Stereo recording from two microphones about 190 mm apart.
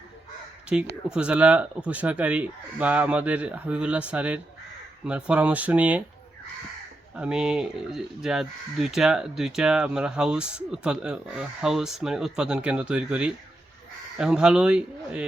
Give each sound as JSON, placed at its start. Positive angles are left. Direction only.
{"t": 0.7, "sound": "speech", "side_deg": -5}
{"t": 7.2, "sound": "speech", "side_deg": -5}